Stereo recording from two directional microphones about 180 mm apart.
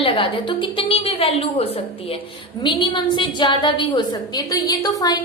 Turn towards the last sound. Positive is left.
turn(degrees=20)  # may be behind; listen again after turning